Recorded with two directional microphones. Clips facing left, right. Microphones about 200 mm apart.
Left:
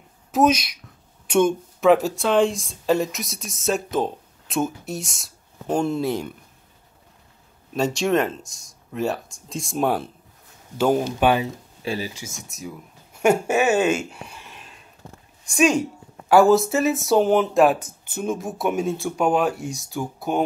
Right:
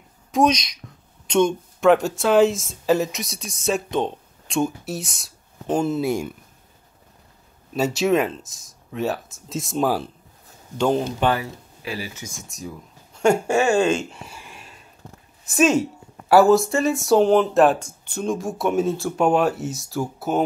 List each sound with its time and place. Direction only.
0.3 s a child's voice: 5° left (ahead or behind)
7.7 s a child's voice: 5° right (ahead or behind); by 12.2 s 30° left (ahead or behind)
12.4 s speech: 5° left (ahead or behind)
13.5 s speech: 20° left (ahead or behind)
13.8 s speech: 5° left (ahead or behind)
15.4 s a woman's voice: 5° right (ahead or behind)